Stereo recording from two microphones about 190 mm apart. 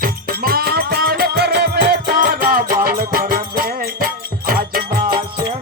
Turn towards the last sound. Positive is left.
turn(degrees=-50)  # may be behind; listen again after turning